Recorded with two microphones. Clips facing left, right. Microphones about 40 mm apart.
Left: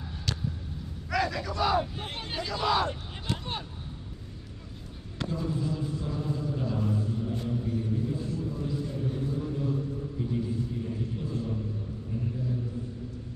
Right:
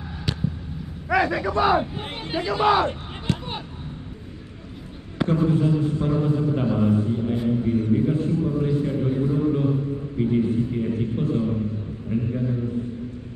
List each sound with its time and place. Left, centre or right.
1.0 s speech: right
5.3 s a man's voice: right
8.5 s a sound: right